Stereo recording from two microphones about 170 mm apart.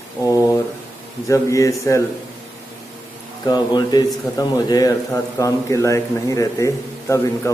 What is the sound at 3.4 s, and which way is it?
Speech, 25° left (ahead or behind).